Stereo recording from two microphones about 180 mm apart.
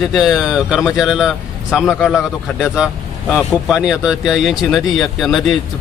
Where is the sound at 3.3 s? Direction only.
Centre (ahead or behind).